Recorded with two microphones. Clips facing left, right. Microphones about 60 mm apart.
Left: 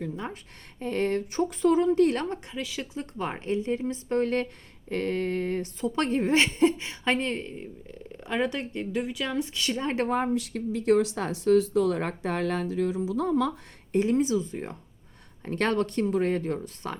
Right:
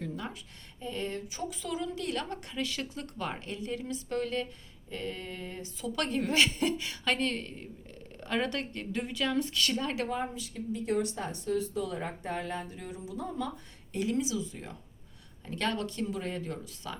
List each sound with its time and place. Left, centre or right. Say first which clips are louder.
0.8 s speech: left 9 dB; left
2.5 s a woman's voice: left 1 dB; centre
2.9 s speech: left 4 dB; left
4.9 s speech: left 11 dB; left
5.8 s a woman's voice: left 5 dB; left
9.8 s speech: left 6 dB; left
13.9 s speech: left 7 dB; left